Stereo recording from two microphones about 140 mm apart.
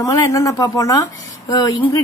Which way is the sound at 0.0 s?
20° left (ahead or behind).